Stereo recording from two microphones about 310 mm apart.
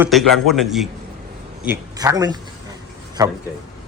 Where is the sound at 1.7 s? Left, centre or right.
Centre.